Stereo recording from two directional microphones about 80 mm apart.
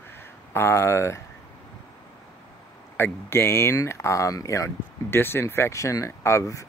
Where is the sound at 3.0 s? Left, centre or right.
Left.